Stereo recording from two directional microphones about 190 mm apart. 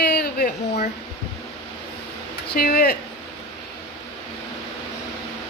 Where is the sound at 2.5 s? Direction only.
55° left (ahead or behind).